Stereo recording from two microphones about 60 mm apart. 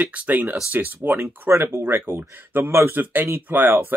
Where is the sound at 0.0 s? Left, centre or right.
Right.